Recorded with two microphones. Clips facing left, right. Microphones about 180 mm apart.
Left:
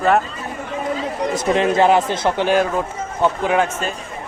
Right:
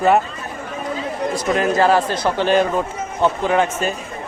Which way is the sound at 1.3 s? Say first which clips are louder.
Left 2 dB; 25° left (ahead or behind).